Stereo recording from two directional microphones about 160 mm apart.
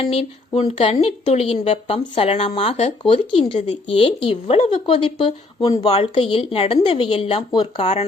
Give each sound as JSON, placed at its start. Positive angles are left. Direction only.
{"t": 0.0, "sound": "speech", "side_deg": 40}